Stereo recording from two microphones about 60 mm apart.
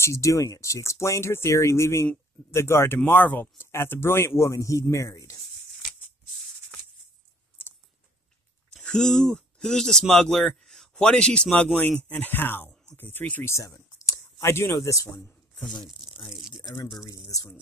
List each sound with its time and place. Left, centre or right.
0.0 s speech: left
3.1 s speech: left
8.8 s speech: centre
11.5 s speech: left
12.6 s a sound: left
13.4 s speech: left
13.7 s clicking: left
14.4 s speech: left
14.8 s speech: left
16.7 s speech: left